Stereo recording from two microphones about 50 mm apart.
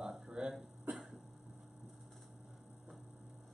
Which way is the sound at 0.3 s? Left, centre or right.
Centre.